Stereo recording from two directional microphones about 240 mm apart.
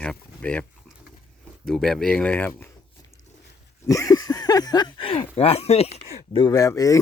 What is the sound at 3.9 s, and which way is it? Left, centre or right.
Speech, centre.